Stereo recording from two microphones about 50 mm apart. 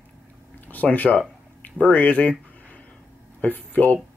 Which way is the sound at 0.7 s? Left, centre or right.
Left.